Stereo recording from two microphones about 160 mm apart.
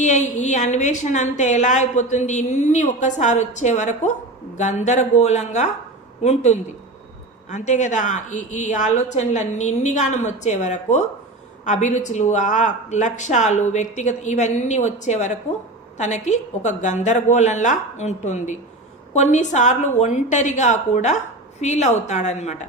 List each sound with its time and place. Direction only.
0.0 s a woman's voice: 50° left (ahead or behind)